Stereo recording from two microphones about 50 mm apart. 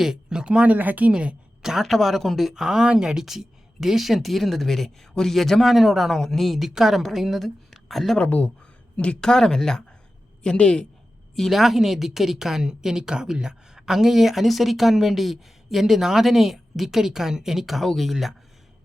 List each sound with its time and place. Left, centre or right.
0.0 s speech: centre; by 1.1 s right
1.1 s speech: right
1.6 s a woman's voice: centre
8.2 s a man's voice: left
9.3 s a man's voice: centre
11.3 s a woman's voice: centre